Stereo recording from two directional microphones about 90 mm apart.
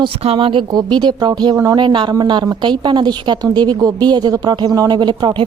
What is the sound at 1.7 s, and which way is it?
A woman's voice, 65° right (ahead or behind).